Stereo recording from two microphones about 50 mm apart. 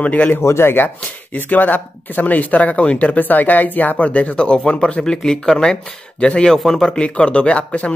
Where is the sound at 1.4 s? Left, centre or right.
Left; by 6.6 s centre.